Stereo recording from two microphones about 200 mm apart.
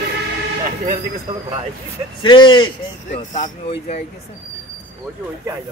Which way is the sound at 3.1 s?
35° left (ahead or behind).